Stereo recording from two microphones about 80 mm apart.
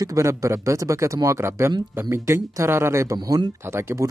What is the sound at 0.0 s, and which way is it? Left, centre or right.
Speech, right.